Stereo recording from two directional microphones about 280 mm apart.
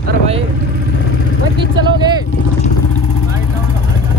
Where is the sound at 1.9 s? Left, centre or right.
Centre.